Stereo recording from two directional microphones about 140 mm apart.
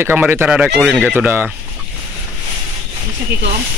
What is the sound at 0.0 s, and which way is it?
Speech, 15° right (ahead or behind).